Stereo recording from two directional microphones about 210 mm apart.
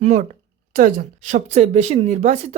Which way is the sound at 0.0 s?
35° right (ahead or behind).